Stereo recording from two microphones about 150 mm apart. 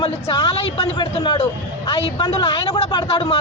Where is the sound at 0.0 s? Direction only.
35° left (ahead or behind).